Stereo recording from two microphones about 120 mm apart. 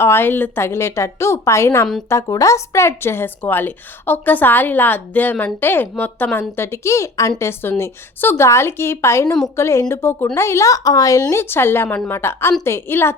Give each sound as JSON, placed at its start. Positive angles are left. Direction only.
{"t": 0.0, "sound": "a woman's voice", "side_deg": 20}